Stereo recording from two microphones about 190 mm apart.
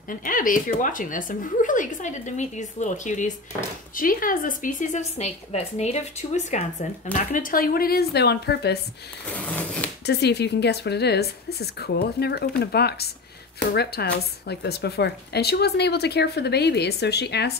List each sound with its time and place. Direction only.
0.1 s a woman's voice: 45° left (ahead or behind)
9.3 s a sound: 5° left (ahead or behind)
10.0 s speech: 60° left (ahead or behind)